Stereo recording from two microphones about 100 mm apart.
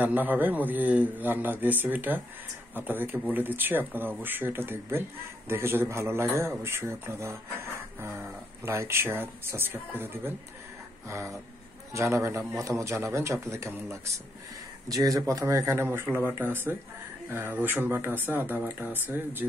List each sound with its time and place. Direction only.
0.0 s a man's voice: 15° right (ahead or behind)
11.9 s speech: 30° right (ahead or behind)